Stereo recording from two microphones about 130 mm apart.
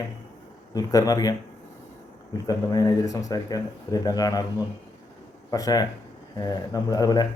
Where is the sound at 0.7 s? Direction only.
30° left (ahead or behind).